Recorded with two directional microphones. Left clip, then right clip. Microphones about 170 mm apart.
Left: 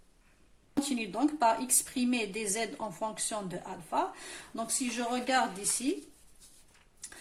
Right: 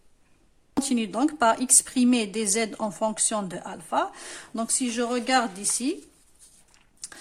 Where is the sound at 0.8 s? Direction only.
50° right (ahead or behind).